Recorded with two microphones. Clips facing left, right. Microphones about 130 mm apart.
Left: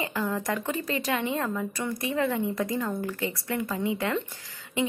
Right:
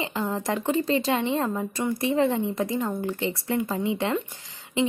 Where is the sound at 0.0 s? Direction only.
20° right (ahead or behind).